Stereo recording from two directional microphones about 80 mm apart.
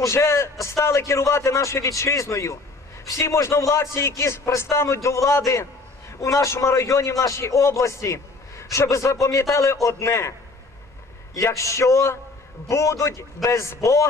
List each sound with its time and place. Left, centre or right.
0.0 s a man's voice: left
11.3 s a man's voice: left